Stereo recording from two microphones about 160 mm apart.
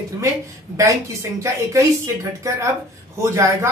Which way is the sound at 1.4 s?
20° right (ahead or behind).